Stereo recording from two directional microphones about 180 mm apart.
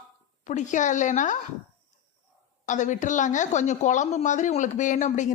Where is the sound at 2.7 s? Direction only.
45° left (ahead or behind).